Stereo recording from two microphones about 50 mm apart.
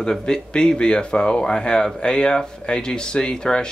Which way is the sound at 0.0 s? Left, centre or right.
Centre.